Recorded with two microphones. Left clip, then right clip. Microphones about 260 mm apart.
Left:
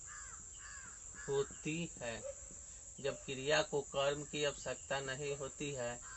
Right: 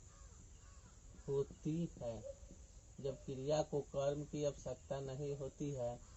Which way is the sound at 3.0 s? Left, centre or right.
Centre.